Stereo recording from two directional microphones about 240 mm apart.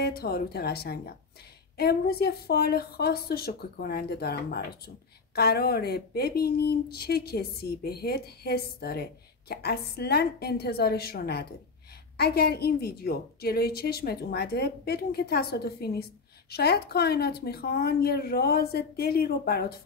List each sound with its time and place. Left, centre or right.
0.0 s speech: left